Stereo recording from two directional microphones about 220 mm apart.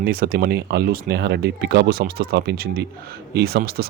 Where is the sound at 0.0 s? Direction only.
40° right (ahead or behind).